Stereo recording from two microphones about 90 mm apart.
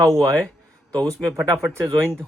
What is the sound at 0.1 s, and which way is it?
Speech, 5° left (ahead or behind).